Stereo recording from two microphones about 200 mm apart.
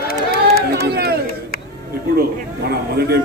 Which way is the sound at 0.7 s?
55° right (ahead or behind).